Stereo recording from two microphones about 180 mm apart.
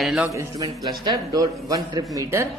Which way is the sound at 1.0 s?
20° right (ahead or behind).